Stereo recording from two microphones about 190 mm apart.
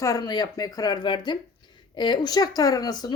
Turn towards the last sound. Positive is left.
turn(degrees=20)  # may be behind; listen again after turning